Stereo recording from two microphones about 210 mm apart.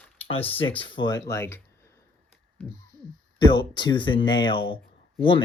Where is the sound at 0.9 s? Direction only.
20° left (ahead or behind).